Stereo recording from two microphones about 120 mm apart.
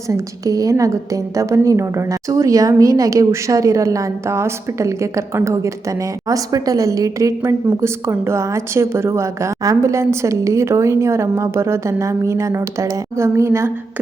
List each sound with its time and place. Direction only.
0.1 s a woman's voice: 30° right (ahead or behind)